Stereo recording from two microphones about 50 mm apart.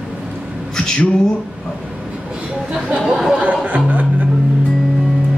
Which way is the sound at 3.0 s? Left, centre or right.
Centre.